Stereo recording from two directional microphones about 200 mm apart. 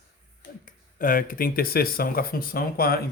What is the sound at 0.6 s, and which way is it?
Speech, 40° left (ahead or behind).